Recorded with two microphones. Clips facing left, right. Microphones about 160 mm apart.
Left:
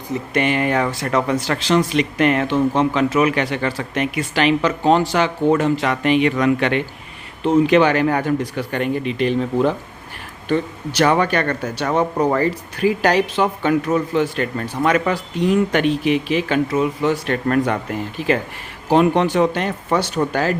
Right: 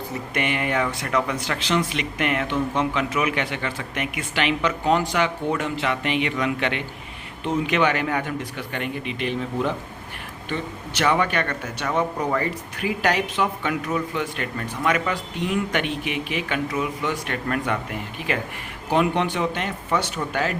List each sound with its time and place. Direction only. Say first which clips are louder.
0.3 s speech: left 6 dB; 35° left (ahead or behind)
7.4 s speech: left 8 dB; 35° left (ahead or behind)
18.9 s speech: left 6 dB; 35° left (ahead or behind)